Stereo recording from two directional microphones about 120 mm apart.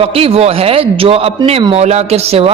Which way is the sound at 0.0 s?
55° right (ahead or behind).